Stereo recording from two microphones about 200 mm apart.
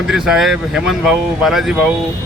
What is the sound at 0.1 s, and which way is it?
Speech, centre (ahead or behind).